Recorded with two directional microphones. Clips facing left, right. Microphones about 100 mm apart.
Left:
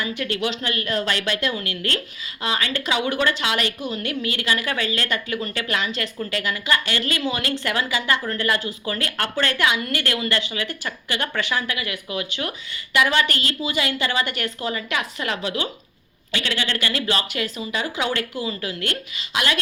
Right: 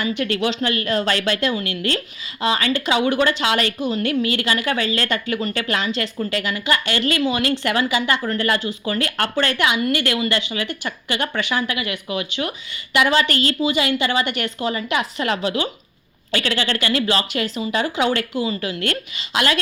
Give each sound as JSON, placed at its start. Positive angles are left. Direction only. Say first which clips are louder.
{"t": 0.3, "sound": "speech", "louder": "right 4 dB", "side_deg": -30}